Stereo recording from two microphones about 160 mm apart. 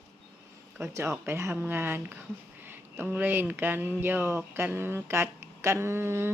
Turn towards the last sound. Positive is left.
turn(degrees=-15)  # may be behind; listen again after turning